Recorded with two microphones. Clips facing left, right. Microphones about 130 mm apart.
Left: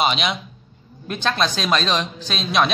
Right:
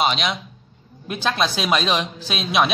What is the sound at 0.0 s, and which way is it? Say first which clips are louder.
Speech: even; centre (ahead or behind).